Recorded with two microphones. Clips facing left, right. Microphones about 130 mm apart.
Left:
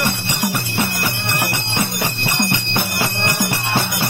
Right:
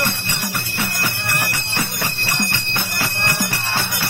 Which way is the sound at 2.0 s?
20° left (ahead or behind).